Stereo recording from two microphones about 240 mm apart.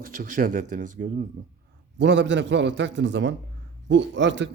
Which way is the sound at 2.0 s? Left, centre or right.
Right.